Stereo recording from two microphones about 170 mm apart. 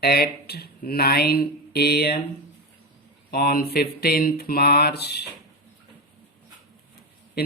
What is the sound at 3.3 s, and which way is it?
Speech, 60° left (ahead or behind).